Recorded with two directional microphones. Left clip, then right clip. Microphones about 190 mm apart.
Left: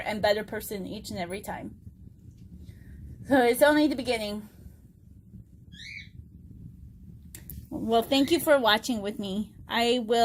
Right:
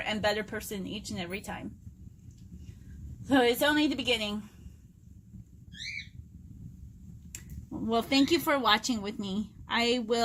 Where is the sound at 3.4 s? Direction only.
5° left (ahead or behind).